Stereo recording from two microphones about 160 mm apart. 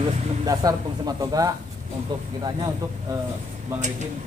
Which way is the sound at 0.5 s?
25° right (ahead or behind).